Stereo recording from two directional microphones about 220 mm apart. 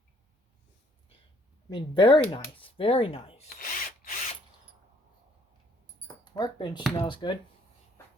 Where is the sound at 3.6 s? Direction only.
40° left (ahead or behind).